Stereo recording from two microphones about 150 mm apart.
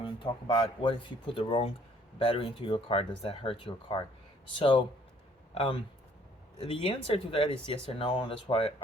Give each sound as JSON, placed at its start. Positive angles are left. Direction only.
{"t": 0.0, "sound": "speech", "side_deg": 35}